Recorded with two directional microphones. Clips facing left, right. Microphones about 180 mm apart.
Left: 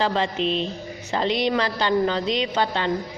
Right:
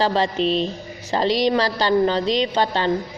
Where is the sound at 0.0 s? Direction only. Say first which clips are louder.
Right 3 dB; 35° right (ahead or behind).